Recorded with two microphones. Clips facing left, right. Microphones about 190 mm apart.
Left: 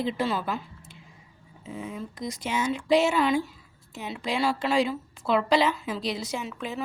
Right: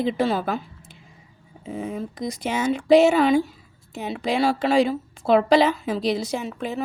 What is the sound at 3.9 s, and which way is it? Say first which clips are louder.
A woman's voice: right 6 dB; 55° right (ahead or behind).